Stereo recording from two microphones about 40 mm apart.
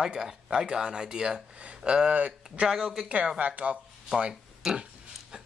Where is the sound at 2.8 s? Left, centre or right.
Centre.